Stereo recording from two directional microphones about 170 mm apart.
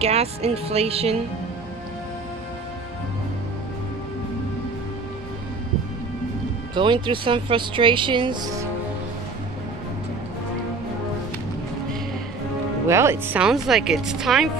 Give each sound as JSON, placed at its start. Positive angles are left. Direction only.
{"t": 0.0, "sound": "speech", "side_deg": -35}
{"t": 6.7, "sound": "speech", "side_deg": -30}
{"t": 12.8, "sound": "speech", "side_deg": -15}